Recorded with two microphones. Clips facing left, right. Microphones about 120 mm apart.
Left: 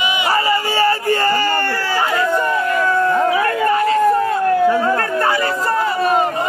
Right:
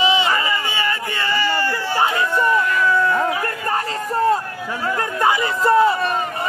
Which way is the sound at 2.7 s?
40° left (ahead or behind).